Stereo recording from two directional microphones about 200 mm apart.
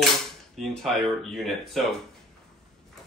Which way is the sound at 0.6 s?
Centre (ahead or behind).